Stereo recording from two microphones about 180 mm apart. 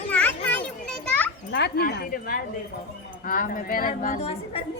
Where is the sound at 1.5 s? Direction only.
65° left (ahead or behind); by 3.9 s 50° left (ahead or behind).